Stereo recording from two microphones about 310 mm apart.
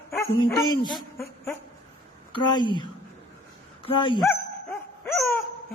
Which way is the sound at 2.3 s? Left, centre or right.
Centre.